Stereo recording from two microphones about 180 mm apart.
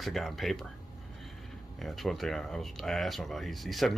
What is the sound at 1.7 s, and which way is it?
Speech, centre (ahead or behind).